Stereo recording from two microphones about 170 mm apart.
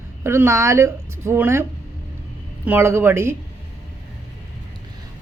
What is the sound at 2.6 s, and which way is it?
Speech, 15° right (ahead or behind).